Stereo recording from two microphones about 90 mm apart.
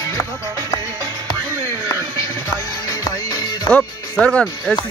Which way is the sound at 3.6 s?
10° left (ahead or behind).